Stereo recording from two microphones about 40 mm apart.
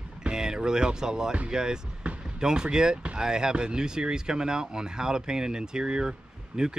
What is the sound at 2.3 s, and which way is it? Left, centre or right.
Speech, centre.